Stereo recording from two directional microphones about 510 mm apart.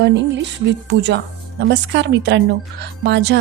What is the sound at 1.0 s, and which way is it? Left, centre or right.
A woman's voice, centre.